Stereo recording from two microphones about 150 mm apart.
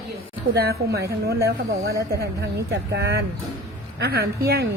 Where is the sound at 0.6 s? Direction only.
90° right.